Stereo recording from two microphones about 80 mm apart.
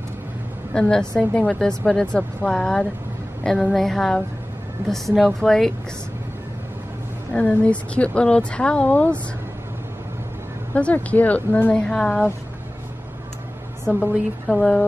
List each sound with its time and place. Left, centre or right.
0.7 s speech: centre
7.3 s speech: centre
10.7 s a woman's voice: centre
13.9 s a woman's voice: centre
14.5 s speech: centre